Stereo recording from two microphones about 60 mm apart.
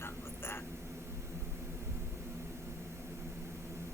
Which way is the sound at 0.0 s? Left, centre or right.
Left.